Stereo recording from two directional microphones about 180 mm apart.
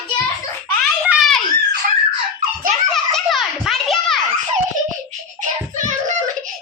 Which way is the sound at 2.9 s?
Centre (ahead or behind).